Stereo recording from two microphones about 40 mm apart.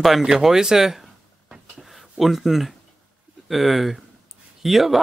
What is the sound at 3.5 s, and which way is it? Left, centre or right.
Speech, centre.